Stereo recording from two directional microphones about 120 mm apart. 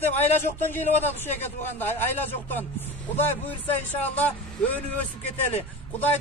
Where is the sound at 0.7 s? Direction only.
15° left (ahead or behind).